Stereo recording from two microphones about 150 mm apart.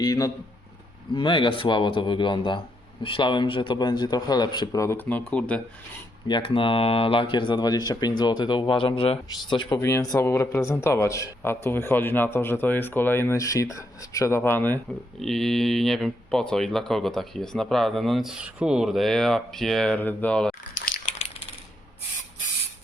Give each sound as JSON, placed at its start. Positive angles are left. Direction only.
{"t": 0.0, "sound": "a man's voice", "side_deg": 25}
{"t": 6.2, "sound": "a man's voice", "side_deg": 35}
{"t": 15.2, "sound": "speech", "side_deg": 0}
{"t": 20.7, "sound": "a sound", "side_deg": 60}